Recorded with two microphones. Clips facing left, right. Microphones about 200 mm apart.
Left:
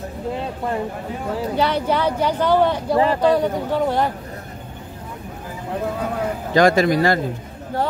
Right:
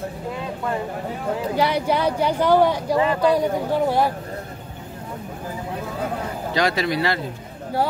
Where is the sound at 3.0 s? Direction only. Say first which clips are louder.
Left 3 dB; 35° left (ahead or behind).